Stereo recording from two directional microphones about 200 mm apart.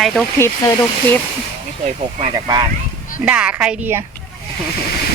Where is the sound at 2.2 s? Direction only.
20° right (ahead or behind).